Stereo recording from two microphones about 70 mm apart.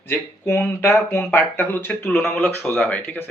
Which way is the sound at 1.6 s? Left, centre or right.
Left.